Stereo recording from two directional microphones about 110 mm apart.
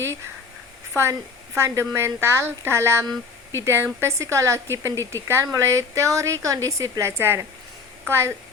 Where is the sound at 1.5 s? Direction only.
25° right (ahead or behind).